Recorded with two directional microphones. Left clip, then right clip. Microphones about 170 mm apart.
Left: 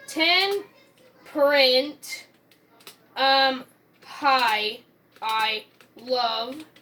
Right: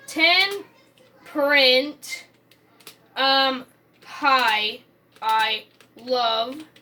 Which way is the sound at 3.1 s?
25° right (ahead or behind).